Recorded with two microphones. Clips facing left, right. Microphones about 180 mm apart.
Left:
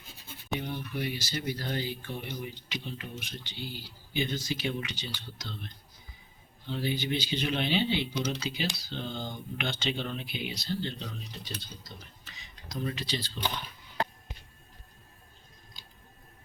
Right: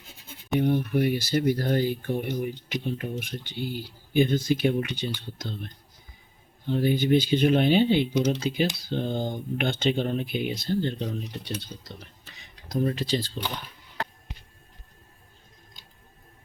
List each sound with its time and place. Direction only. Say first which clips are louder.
0.6 s speech: right 14 dB; 55° right (ahead or behind)
11.4 s speech: right 7 dB; 65° right (ahead or behind)
12.4 s speech: right 9 dB; 50° right (ahead or behind)